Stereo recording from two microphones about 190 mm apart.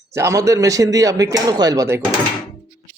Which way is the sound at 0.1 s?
15° right (ahead or behind).